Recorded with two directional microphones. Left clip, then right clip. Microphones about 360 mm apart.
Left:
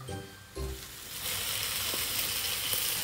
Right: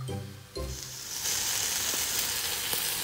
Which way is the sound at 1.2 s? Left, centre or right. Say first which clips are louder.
Right 3 dB; right.